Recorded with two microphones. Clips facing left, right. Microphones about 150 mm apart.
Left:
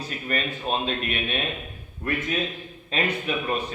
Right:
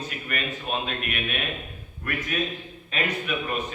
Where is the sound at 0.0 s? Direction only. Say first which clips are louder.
Left 3 dB; 35° left (ahead or behind).